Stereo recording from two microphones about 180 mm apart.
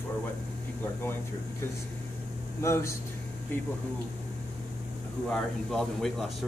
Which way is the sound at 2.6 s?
15° left (ahead or behind).